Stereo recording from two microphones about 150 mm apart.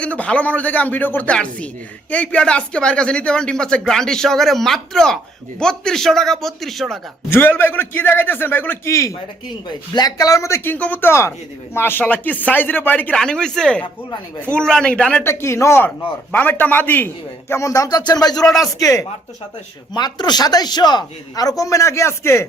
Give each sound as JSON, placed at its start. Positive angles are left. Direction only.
{"t": 0.0, "sound": "speech", "side_deg": 10}
{"t": 7.3, "sound": "speech", "side_deg": 15}
{"t": 15.2, "sound": "speech", "side_deg": 15}
{"t": 18.4, "sound": "speech", "side_deg": 0}
{"t": 18.8, "sound": "speech", "side_deg": 20}